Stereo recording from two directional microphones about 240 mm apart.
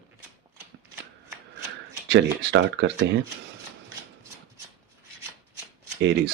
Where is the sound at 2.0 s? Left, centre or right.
Right.